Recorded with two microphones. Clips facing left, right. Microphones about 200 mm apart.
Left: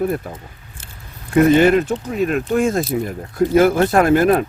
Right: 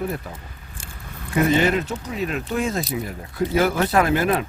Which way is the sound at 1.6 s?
50° left (ahead or behind).